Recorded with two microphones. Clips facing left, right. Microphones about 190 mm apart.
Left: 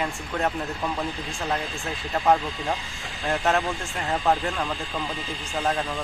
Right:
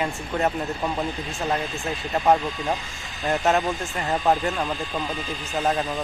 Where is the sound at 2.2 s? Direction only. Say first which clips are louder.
Right 1 dB; 15° right (ahead or behind).